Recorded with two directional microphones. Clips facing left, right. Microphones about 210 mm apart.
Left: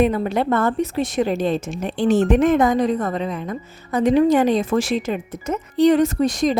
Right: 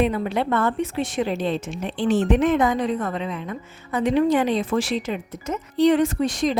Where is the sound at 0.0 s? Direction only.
45° left (ahead or behind).